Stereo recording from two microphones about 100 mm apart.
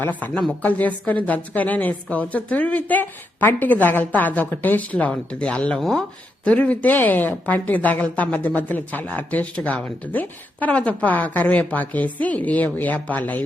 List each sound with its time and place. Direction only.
0.0 s speech: 15° left (ahead or behind)